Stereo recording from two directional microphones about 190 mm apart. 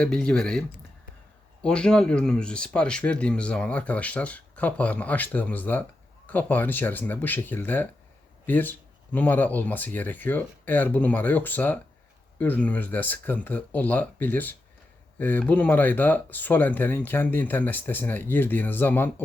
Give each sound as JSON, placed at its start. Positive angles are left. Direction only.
{"t": 0.0, "sound": "speech", "side_deg": 5}
{"t": 1.6, "sound": "speech", "side_deg": 5}